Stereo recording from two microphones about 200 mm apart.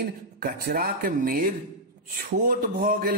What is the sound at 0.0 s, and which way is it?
Mantra, 50° right (ahead or behind).